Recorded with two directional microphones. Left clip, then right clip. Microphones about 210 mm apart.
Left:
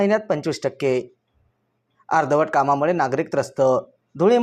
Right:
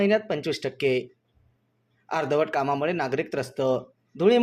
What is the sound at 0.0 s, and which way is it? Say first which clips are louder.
Speech: left 4 dB; 10° left (ahead or behind).